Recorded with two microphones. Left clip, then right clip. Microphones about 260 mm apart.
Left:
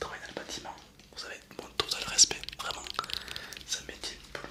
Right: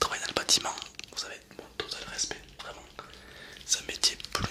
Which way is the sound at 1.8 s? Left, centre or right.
Centre.